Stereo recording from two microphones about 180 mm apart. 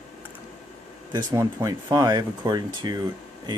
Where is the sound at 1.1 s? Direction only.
20° right (ahead or behind).